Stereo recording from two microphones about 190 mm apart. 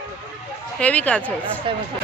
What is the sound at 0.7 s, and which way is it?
Speech, 5° left (ahead or behind).